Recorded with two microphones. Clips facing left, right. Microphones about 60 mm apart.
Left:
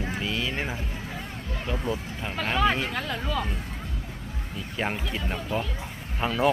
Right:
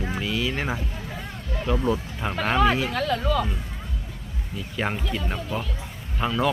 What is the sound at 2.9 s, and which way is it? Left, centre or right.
Speech, centre.